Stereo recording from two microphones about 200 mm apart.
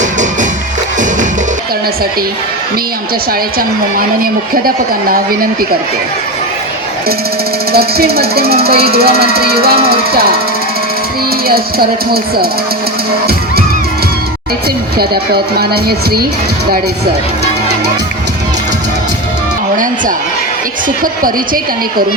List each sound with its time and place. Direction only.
3.9 s speech: 45° right (ahead or behind)
7.7 s speech: 50° right (ahead or behind)
11.4 s speech: 50° right (ahead or behind)
14.9 s speech: 50° right (ahead or behind)
19.7 s a sound: 40° right (ahead or behind)
21.0 s speech: 45° right (ahead or behind)